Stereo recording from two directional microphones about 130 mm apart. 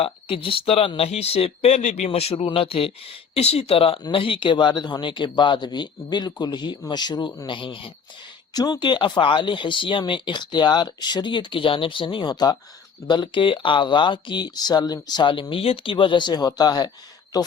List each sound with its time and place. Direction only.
0.0 s speech: 45° left (ahead or behind); by 2.0 s 60° left (ahead or behind)
2.0 s speech: 50° left (ahead or behind)
8.5 s speech: 30° left (ahead or behind)